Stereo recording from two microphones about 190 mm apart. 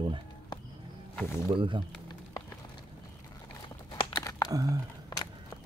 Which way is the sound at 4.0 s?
20° left (ahead or behind).